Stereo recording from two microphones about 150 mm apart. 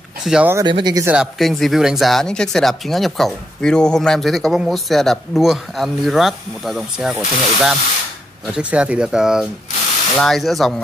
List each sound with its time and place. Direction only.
0.2 s speech: 5° right (ahead or behind)
0.7 s speech: 30° right (ahead or behind)
1.0 s speech: 5° right (ahead or behind)